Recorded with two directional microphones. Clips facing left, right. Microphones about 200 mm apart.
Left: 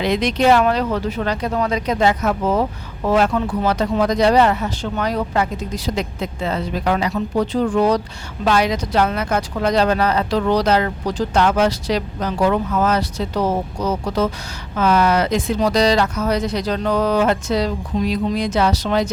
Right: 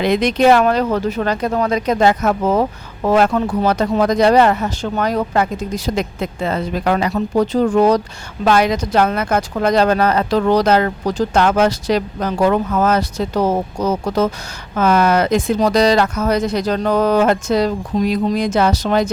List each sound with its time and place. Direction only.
0.0 s speech: 50° right (ahead or behind)